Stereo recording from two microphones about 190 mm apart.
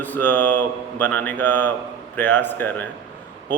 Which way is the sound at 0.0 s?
10° left (ahead or behind).